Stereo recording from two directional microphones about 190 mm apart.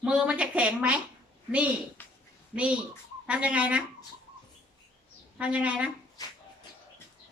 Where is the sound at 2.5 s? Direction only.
5° right (ahead or behind).